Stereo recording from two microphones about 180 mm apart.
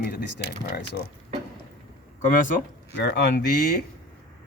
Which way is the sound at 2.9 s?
65° left (ahead or behind).